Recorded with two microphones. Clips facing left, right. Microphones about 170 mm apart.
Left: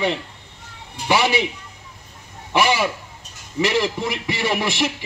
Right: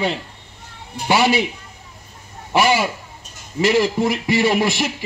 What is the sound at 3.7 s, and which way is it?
Speech, 40° right (ahead or behind).